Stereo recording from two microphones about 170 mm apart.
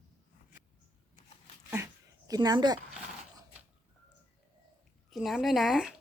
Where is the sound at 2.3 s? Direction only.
25° right (ahead or behind).